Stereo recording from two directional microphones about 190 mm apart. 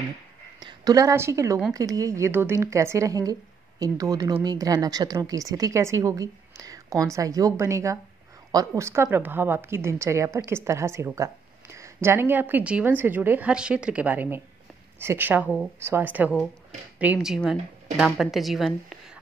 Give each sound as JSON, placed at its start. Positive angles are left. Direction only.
{"t": 0.6, "sound": "a woman's voice", "side_deg": -20}